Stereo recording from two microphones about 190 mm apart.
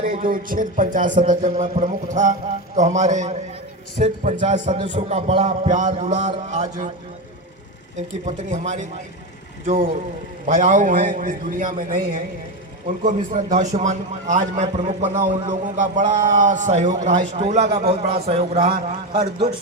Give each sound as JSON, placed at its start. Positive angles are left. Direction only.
{"t": 0.0, "sound": "a man's voice", "side_deg": -45}
{"t": 8.2, "sound": "a man's voice", "side_deg": -40}
{"t": 13.0, "sound": "a man's voice", "side_deg": -40}